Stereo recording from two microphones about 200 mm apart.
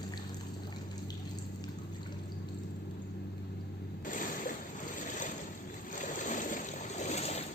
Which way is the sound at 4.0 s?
40° left (ahead or behind).